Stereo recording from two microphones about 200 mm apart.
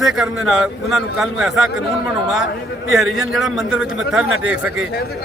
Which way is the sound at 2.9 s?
Centre (ahead or behind).